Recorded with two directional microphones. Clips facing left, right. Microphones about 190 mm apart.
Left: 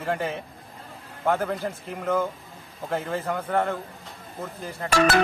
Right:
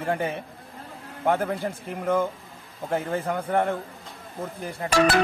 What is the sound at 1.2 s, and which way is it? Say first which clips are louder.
Speech: right 1 dB; 15° right (ahead or behind).